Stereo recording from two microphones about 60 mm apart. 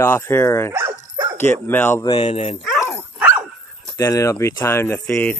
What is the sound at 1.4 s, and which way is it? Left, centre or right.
Speech, left.